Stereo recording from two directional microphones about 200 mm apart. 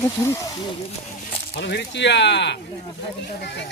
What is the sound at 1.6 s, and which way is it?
Speech, 55° left (ahead or behind).